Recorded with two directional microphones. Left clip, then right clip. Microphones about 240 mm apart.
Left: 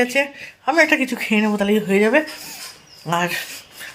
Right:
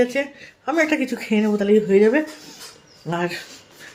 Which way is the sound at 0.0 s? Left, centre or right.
Centre.